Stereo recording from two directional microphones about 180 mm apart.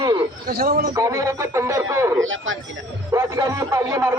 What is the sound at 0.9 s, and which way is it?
Speech, 15° right (ahead or behind).